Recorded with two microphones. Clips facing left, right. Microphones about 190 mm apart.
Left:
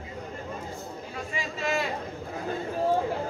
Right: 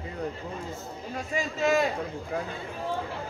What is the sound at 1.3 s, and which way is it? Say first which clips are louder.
Speech: right 5 dB; 45° right (ahead or behind).